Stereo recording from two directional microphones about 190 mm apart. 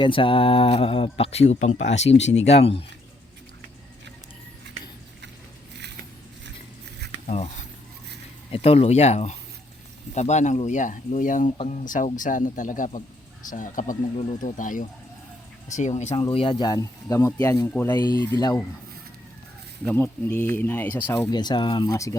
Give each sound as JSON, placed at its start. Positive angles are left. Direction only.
{"t": 0.0, "sound": "speech", "side_deg": 25}
{"t": 7.3, "sound": "a sound", "side_deg": 35}
{"t": 8.5, "sound": "speech", "side_deg": 30}
{"t": 11.5, "sound": "speech", "side_deg": 30}
{"t": 11.9, "sound": "speech", "side_deg": 40}
{"t": 19.8, "sound": "speech", "side_deg": 5}
{"t": 21.2, "sound": "speech", "side_deg": 20}